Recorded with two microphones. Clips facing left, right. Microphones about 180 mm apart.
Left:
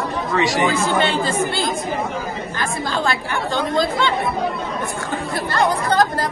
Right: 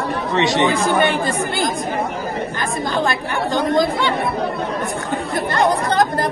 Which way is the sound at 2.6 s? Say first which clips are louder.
Right 1 dB; 20° right (ahead or behind).